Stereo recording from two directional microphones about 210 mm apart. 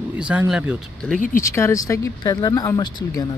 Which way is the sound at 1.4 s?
15° left (ahead or behind).